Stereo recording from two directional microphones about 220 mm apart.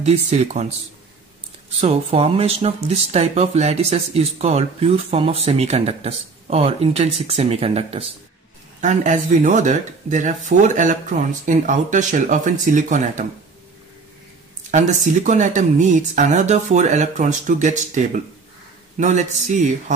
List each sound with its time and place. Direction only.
0.0 s speech: 30° right (ahead or behind)
1.8 s speech: 25° right (ahead or behind)
14.7 s speech: 35° right (ahead or behind)